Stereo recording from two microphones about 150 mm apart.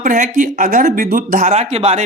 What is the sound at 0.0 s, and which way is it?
Speech, 60° right (ahead or behind).